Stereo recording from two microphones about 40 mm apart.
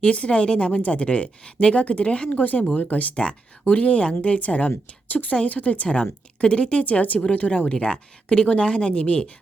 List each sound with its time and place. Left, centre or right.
0.0 s speech: left
2.3 s speech: left
3.2 s speech: left
3.7 s speech: left
5.0 s a woman's voice: left
5.3 s speech: left
6.4 s speech: left
7.7 s speech: left